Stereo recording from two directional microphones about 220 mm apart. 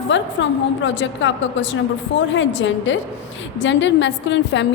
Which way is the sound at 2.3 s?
55° left (ahead or behind).